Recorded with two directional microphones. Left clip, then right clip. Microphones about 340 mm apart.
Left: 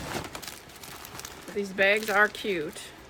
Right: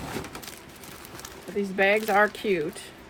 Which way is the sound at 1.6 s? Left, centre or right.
Centre.